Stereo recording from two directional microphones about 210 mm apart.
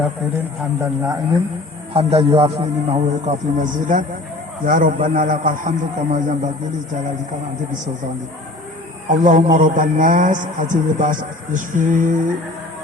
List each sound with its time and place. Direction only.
0.3 s a man's voice: 10° right (ahead or behind)
1.9 s a man's voice: 25° right (ahead or behind)
9.0 s a man's voice: 35° right (ahead or behind)